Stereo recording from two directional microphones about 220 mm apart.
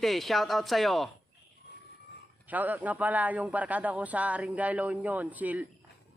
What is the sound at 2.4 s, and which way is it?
A man's voice, 5° right (ahead or behind).